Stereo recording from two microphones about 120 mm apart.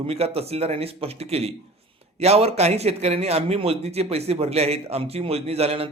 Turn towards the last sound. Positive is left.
turn(degrees=-55)  # may be behind; listen again after turning